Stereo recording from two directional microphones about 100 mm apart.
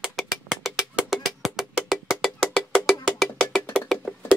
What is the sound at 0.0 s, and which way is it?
Music, 5° right (ahead or behind).